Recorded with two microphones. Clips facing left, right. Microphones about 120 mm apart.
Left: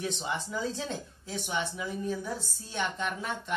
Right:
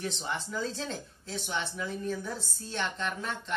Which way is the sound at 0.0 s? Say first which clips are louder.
Left 1 dB; 10° left (ahead or behind).